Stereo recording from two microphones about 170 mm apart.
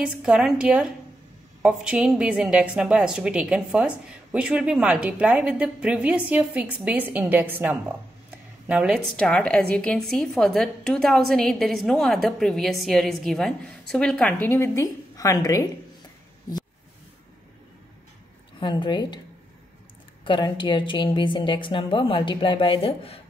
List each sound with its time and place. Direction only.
0.0 s a woman's voice: 5° right (ahead or behind); by 15.7 s 20° left (ahead or behind)
18.6 s a woman's voice: 25° left (ahead or behind)
20.2 s a woman's voice: 25° left (ahead or behind)